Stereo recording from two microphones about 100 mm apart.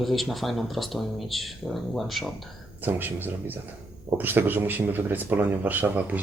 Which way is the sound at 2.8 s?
20° right (ahead or behind).